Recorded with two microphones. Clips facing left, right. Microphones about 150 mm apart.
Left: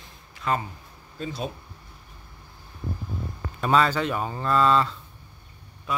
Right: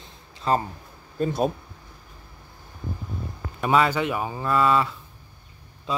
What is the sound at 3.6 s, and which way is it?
Speech, 15° right (ahead or behind).